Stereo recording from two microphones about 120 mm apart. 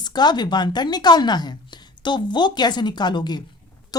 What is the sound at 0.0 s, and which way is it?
A woman's voice, 35° left (ahead or behind).